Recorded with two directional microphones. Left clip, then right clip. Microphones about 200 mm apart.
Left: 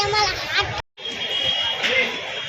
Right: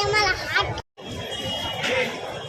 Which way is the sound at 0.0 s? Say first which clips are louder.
Left 1 dB; 25° right (ahead or behind).